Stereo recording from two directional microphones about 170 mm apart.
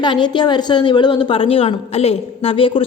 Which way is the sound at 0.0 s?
25° left (ahead or behind).